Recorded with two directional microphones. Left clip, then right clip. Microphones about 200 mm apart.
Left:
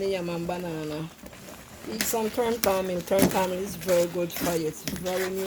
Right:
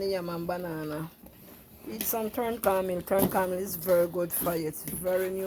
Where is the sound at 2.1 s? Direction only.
15° right (ahead or behind).